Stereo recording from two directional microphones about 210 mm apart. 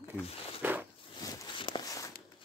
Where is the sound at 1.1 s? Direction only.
20° left (ahead or behind).